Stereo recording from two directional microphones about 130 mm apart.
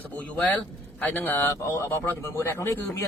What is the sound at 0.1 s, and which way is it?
Speech, 10° left (ahead or behind).